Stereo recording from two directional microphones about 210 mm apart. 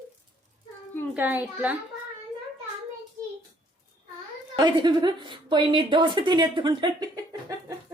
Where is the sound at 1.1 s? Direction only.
10° right (ahead or behind).